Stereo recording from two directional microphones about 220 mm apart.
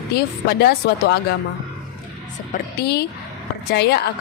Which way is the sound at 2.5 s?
45° left (ahead or behind).